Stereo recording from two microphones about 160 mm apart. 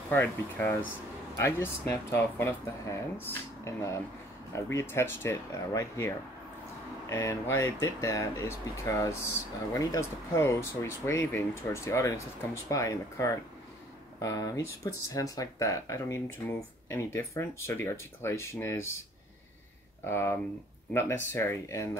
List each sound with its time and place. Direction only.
0.1 s speech: 10° left (ahead or behind)
20.1 s speech: 15° left (ahead or behind)